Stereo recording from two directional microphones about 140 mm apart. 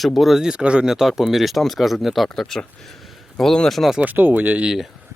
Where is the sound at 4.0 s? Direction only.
15° right (ahead or behind).